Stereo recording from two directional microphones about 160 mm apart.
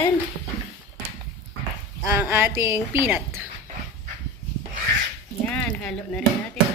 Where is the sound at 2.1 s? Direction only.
15° right (ahead or behind).